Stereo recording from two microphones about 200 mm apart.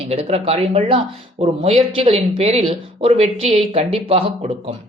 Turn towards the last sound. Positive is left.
turn(degrees=-30)  # may be behind; listen again after turning